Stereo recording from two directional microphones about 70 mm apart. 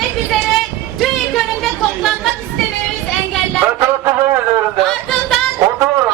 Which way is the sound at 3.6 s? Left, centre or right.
Right.